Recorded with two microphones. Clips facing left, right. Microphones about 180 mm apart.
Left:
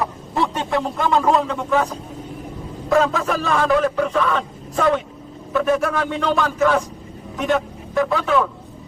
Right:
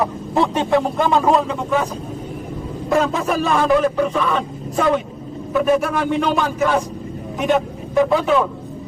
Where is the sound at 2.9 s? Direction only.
20° right (ahead or behind).